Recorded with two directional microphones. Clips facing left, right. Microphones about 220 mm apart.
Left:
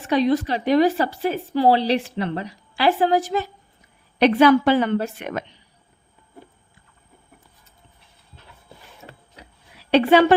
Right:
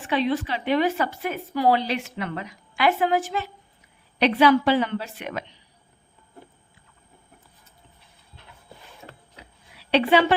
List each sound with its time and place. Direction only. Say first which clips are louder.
0.0 s a woman's voice: left 5 dB; 40° left (ahead or behind)
9.0 s a sound: left 1 dB; 25° left (ahead or behind)
9.9 s a woman's voice: left 4 dB; 45° left (ahead or behind)